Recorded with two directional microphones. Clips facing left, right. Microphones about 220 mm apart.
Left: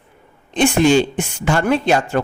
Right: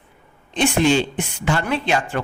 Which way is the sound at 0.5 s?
45° left (ahead or behind).